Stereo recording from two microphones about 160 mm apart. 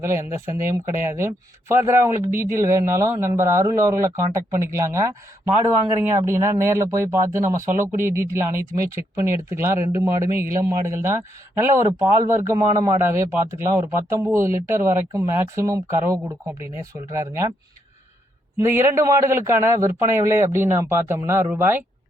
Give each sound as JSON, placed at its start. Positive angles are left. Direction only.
{"t": 0.0, "sound": "a man's voice", "side_deg": -20}
{"t": 6.2, "sound": "a man's voice", "side_deg": -15}
{"t": 18.6, "sound": "a man's voice", "side_deg": -15}